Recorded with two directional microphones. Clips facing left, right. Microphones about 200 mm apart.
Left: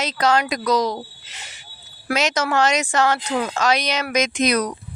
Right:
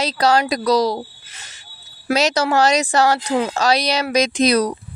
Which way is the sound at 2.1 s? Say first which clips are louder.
Right 3 dB; 35° right (ahead or behind).